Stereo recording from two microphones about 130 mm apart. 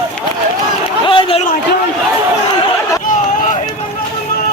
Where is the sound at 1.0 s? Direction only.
40° left (ahead or behind).